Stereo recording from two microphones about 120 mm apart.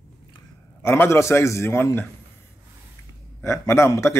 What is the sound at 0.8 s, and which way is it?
A man's voice, 20° left (ahead or behind).